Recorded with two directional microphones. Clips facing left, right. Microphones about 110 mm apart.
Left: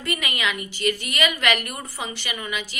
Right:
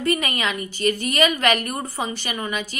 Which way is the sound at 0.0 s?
40° right (ahead or behind).